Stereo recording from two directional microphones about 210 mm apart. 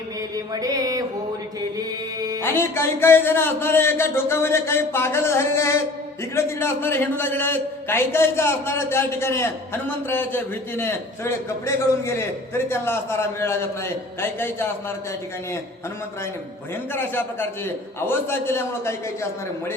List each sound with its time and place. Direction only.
0.3 s mantra: 15° right (ahead or behind)
2.1 s music: 15° right (ahead or behind)
2.4 s a man's voice: 10° left (ahead or behind)
16.9 s a man's voice: 10° left (ahead or behind)